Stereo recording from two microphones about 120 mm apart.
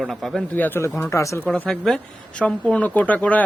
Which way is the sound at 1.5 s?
5° left (ahead or behind).